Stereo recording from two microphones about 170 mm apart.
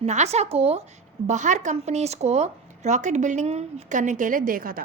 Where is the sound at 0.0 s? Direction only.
40° right (ahead or behind).